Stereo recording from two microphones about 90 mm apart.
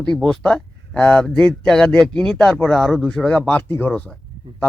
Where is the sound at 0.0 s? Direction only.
10° left (ahead or behind).